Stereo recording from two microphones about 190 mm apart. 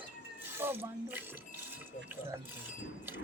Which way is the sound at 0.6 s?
10° right (ahead or behind).